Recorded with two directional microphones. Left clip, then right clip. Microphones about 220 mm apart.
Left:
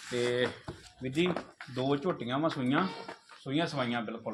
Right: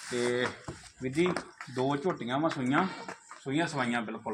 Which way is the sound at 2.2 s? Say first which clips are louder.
Right 1 dB; 25° left (ahead or behind).